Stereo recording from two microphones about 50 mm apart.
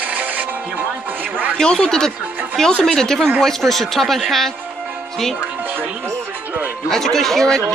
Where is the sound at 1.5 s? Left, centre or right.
Centre.